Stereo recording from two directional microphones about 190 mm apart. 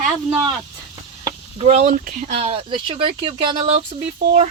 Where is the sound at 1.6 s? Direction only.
35° right (ahead or behind).